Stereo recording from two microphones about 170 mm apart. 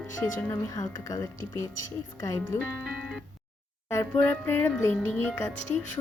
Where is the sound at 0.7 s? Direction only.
20° left (ahead or behind).